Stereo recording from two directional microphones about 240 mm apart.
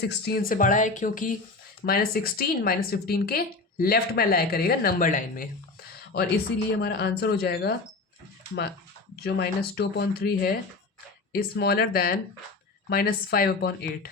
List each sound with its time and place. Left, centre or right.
0.0 s a woman's voice: left
6.8 s a woman's voice: left
9.2 s a woman's voice: left